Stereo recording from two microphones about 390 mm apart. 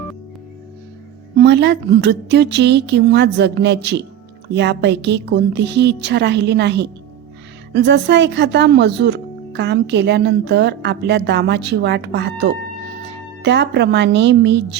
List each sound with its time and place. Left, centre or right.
1.4 s speech: right